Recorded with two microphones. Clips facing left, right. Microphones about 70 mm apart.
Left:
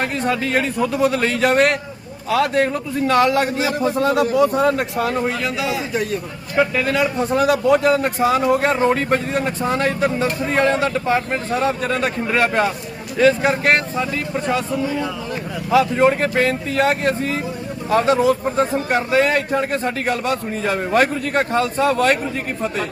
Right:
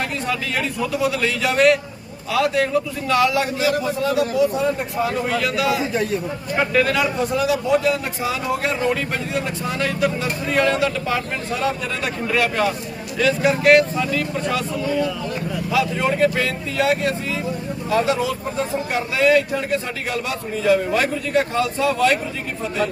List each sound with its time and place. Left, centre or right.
0.3 s a man's voice: left
4.8 s speech: left
5.3 s a man's voice: left
5.6 s a man's voice: centre
6.8 s a man's voice: left
7.3 s speech: left
15.7 s a man's voice: left